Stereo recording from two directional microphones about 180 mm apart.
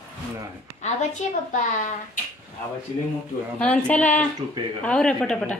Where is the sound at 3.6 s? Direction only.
10° left (ahead or behind).